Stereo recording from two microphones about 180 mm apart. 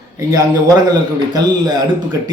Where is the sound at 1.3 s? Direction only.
20° right (ahead or behind).